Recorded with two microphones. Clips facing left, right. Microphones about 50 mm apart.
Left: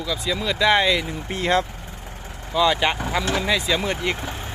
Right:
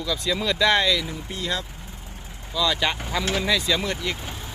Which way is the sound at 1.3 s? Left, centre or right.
Left.